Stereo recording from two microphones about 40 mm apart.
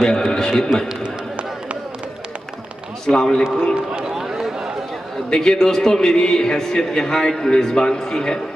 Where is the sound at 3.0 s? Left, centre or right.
Centre.